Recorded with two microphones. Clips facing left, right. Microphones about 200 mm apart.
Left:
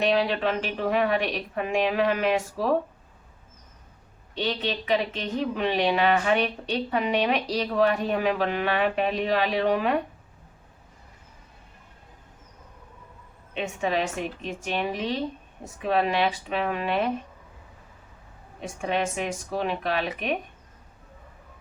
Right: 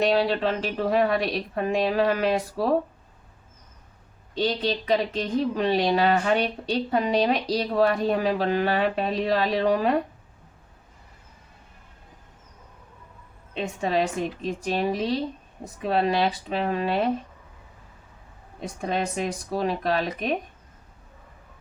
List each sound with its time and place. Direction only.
0.0 s a woman's voice: 35° right (ahead or behind)
4.4 s a woman's voice: 35° right (ahead or behind)
13.5 s a woman's voice: 35° right (ahead or behind)
18.6 s a woman's voice: 35° right (ahead or behind)